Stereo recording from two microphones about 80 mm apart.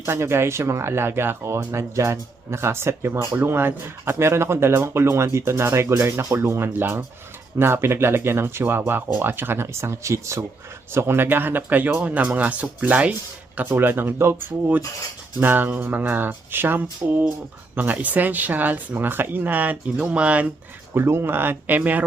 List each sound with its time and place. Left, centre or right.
0.0 s speech: right; by 20.5 s centre
20.9 s speech: right